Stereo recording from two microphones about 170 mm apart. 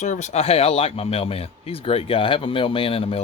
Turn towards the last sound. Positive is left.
turn(degrees=35)  # may be behind; listen again after turning